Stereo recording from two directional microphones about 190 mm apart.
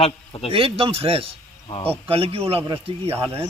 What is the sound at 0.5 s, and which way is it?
Speech, 30° right (ahead or behind).